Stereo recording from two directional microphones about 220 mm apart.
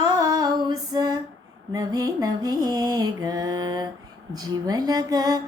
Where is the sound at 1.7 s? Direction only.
15° right (ahead or behind).